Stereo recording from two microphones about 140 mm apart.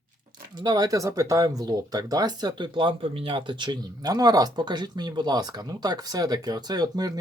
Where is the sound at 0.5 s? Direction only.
30° right (ahead or behind).